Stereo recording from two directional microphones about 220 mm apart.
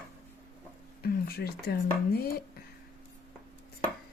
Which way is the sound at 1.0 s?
45° left (ahead or behind).